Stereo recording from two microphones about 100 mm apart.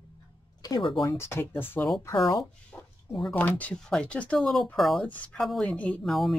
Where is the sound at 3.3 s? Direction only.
15° left (ahead or behind).